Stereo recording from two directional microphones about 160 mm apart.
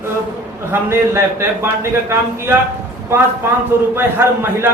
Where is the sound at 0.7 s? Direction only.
15° right (ahead or behind).